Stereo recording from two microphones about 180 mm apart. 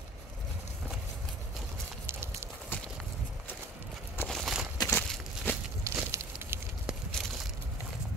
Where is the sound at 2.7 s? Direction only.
10° left (ahead or behind).